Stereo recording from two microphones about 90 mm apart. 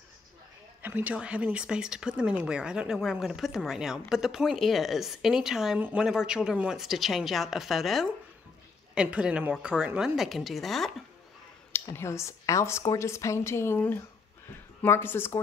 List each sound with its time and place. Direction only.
0.8 s speech: 20° right (ahead or behind); by 8.1 s centre (ahead or behind)
8.9 s speech: 10° right (ahead or behind)
11.7 s a woman's voice: 30° left (ahead or behind)